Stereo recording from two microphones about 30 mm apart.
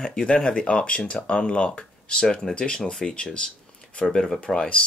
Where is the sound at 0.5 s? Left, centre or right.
Left.